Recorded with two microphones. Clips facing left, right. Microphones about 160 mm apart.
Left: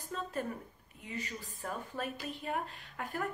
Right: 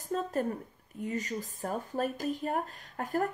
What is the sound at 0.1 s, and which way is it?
Speech, 40° right (ahead or behind).